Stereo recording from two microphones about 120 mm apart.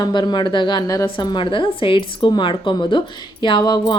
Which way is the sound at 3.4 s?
40° left (ahead or behind).